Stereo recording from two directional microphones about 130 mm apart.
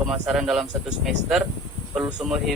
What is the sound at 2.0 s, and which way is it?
Speech, 5° right (ahead or behind).